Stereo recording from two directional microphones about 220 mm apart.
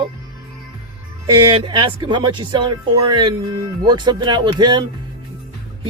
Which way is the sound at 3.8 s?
20° right (ahead or behind).